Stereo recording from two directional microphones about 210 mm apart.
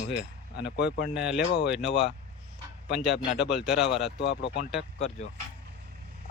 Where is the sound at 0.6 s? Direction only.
55° left (ahead or behind).